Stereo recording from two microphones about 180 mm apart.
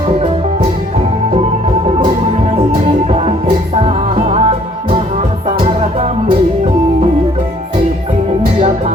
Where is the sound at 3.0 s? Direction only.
35° right (ahead or behind).